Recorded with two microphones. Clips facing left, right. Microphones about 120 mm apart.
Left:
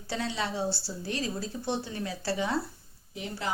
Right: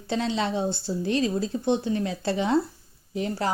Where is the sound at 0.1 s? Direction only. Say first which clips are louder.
Right 6 dB; 20° right (ahead or behind).